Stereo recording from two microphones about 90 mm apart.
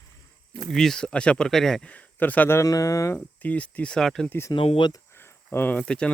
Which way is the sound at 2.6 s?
40° left (ahead or behind).